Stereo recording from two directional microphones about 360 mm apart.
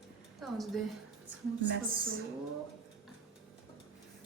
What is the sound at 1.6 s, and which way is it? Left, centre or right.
Speech, right.